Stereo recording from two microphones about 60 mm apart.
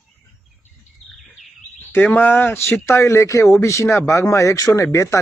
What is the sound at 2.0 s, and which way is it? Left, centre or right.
Speech, left.